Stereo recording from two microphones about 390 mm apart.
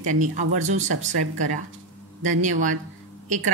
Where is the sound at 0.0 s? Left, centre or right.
Centre.